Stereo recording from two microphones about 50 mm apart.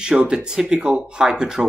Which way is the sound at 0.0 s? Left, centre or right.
Centre.